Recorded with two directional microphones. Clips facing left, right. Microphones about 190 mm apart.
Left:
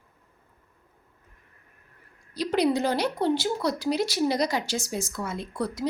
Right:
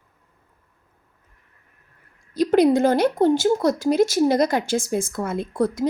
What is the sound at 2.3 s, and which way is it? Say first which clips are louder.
Speech: right 7 dB; 50° right (ahead or behind).